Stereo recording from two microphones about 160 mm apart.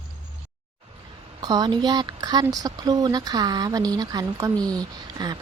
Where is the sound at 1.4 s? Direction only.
25° right (ahead or behind).